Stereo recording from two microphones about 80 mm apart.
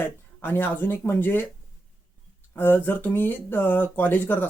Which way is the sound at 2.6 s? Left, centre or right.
Left.